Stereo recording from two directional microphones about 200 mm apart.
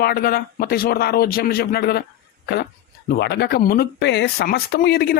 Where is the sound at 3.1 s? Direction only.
55° left (ahead or behind).